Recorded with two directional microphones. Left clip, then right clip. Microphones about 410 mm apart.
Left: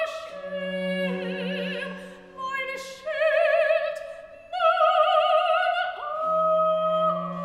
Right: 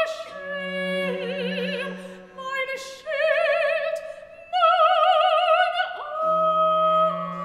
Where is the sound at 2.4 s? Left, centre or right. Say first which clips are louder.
Right 2 dB; centre.